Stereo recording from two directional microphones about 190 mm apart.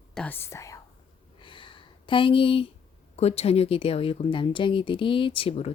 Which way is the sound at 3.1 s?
35° left (ahead or behind).